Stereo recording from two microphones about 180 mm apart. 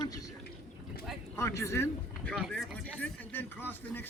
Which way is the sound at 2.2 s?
5° left (ahead or behind).